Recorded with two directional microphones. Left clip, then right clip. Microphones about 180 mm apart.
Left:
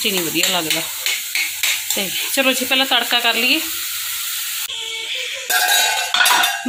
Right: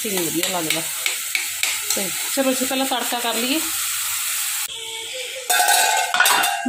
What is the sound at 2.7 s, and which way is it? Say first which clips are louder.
Sizzle: left 6 dB; 10° right (ahead or behind).